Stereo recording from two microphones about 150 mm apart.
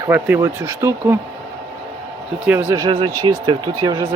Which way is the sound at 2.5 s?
15° right (ahead or behind).